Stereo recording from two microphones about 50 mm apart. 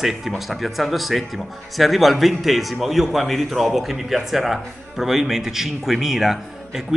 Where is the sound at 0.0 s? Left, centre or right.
Centre.